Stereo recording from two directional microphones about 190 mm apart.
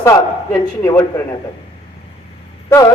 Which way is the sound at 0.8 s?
15° left (ahead or behind).